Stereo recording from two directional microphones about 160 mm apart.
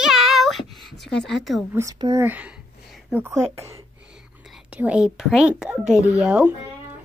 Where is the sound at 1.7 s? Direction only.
20° right (ahead or behind).